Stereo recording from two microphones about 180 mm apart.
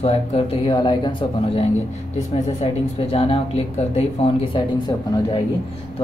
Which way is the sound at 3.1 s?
30° left (ahead or behind).